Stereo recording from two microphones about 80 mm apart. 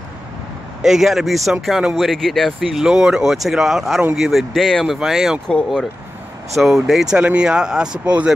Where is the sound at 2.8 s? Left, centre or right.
Centre.